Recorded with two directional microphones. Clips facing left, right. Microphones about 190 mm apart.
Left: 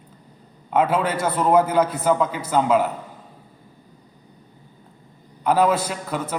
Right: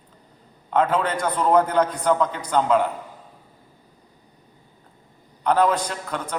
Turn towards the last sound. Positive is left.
turn(degrees=5)  # may be behind; listen again after turning